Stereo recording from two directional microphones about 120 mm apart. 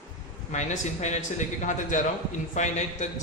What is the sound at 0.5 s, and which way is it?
A man's voice, 80° left.